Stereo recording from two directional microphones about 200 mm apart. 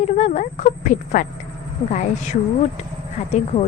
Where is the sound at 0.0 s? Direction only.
35° left (ahead or behind).